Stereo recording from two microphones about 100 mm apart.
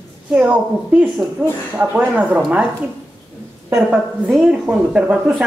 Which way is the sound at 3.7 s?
10° right (ahead or behind).